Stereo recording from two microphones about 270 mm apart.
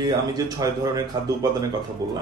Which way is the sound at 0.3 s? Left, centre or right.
Centre.